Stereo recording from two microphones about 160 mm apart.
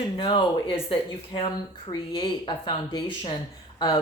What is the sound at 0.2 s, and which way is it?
Speech, 30° left (ahead or behind).